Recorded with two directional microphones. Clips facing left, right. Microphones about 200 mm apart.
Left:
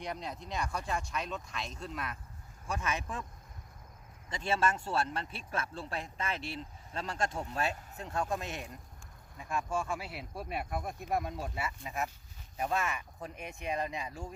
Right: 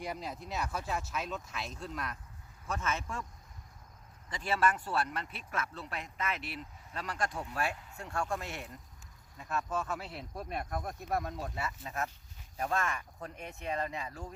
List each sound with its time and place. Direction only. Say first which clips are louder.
0.0 s speech: even; centre (ahead or behind)
2.6 s speech: even; 15° left (ahead or behind)
4.3 s speech: even; 25° left (ahead or behind)